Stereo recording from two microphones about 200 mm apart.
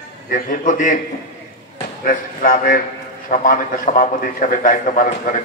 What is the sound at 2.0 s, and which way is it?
A man's voice, 45° left (ahead or behind).